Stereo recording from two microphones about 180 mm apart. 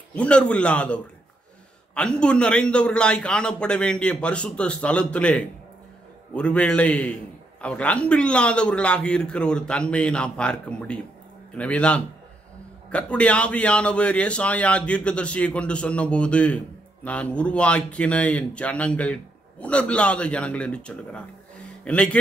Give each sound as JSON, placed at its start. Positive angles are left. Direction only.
{"t": 0.1, "sound": "a man's voice", "side_deg": 5}